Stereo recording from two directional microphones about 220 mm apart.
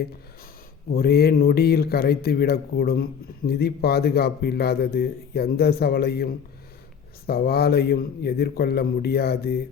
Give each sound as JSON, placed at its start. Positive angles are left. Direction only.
{"t": 0.9, "sound": "speech", "side_deg": 45}